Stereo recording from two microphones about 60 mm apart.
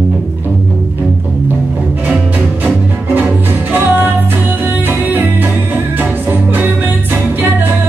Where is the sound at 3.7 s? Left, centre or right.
Right.